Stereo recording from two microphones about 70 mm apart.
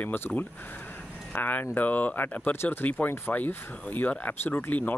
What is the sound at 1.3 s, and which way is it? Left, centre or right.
Speech, left.